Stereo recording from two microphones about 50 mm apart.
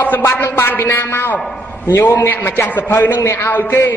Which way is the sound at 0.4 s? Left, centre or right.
Left.